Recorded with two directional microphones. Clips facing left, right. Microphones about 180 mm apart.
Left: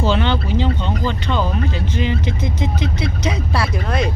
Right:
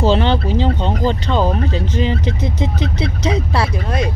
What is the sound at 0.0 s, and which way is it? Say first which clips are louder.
Speech: right 3 dB; 35° right (ahead or behind).